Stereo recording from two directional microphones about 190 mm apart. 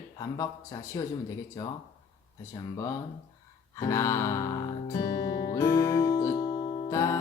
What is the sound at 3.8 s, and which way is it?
Music, 15° left (ahead or behind).